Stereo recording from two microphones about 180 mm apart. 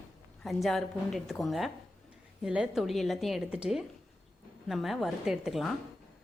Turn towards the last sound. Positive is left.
turn(degrees=0)  # may be behind; listen again after turning